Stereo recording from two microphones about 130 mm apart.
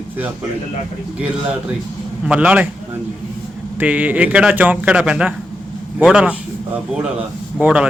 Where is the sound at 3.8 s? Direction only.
15° right (ahead or behind).